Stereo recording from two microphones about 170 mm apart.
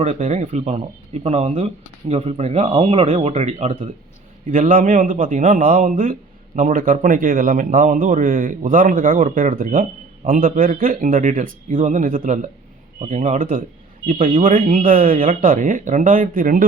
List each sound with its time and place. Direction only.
0.0 s a man's voice: 45° right (ahead or behind)